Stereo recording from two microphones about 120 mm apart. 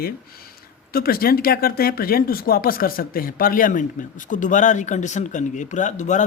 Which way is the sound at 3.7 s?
90° left.